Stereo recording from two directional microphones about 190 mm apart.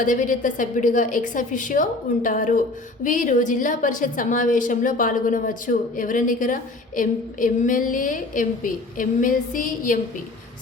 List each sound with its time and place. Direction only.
0.0 s a woman's voice: 45° left (ahead or behind)